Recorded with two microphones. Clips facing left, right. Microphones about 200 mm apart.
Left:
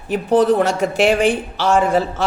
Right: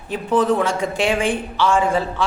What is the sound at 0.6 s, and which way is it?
Speech, 70° left (ahead or behind).